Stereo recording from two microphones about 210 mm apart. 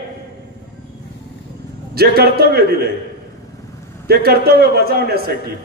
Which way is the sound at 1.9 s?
50° right (ahead or behind).